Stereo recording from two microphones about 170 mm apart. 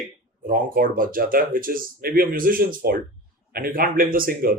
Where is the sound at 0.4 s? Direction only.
55° right (ahead or behind).